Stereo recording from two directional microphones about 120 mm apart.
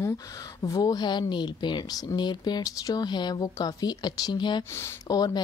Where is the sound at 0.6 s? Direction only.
30° left (ahead or behind).